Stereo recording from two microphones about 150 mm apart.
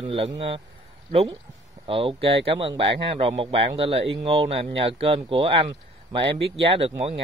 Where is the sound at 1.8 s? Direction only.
35° right (ahead or behind).